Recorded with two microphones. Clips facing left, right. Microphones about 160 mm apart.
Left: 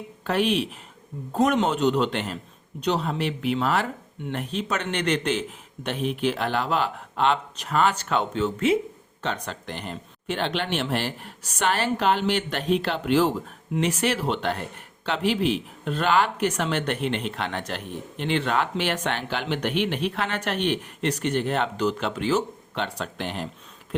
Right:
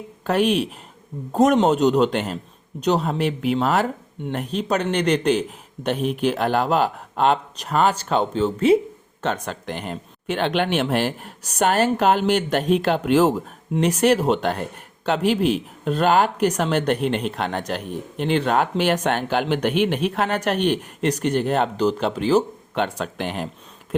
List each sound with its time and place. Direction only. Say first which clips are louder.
0.3 s a man's voice: right 4 dB; 45° right (ahead or behind)
9.2 s speech: right 5 dB; 50° right (ahead or behind)
22.7 s speech: right 6 dB; 50° right (ahead or behind)